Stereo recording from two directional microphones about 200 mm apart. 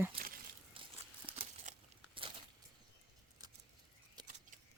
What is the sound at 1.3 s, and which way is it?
Crumpling, 25° right (ahead or behind).